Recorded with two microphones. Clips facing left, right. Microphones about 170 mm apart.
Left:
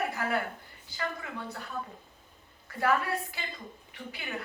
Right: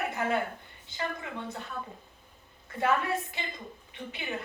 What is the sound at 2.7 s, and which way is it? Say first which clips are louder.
A woman's voice: even; 20° right (ahead or behind).